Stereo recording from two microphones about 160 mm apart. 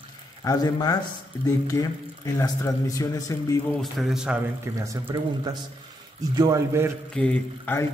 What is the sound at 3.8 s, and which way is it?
Speech, centre (ahead or behind).